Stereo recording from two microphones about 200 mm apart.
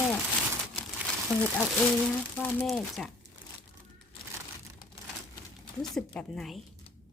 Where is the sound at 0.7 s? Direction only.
5° left (ahead or behind).